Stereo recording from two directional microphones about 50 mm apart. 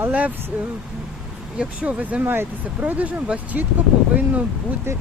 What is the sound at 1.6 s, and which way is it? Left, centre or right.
Speech, right.